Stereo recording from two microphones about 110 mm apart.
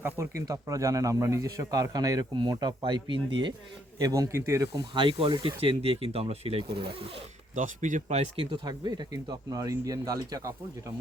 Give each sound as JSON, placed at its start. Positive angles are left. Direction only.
{"t": 0.0, "sound": "speech", "side_deg": -25}
{"t": 3.9, "sound": "speech", "side_deg": -35}
{"t": 4.8, "sound": "speech", "side_deg": -50}
{"t": 8.4, "sound": "speech", "side_deg": -40}